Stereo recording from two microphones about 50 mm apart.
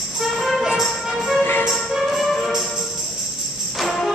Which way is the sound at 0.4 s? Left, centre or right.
Centre.